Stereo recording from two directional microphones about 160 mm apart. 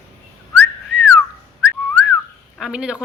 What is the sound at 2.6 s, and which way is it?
Speech, 5° right (ahead or behind).